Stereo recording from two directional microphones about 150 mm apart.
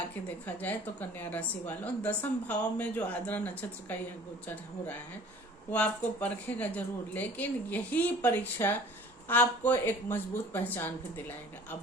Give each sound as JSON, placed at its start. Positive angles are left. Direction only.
{"t": 0.4, "sound": "a woman's voice", "side_deg": 10}
{"t": 5.7, "sound": "a woman's voice", "side_deg": 10}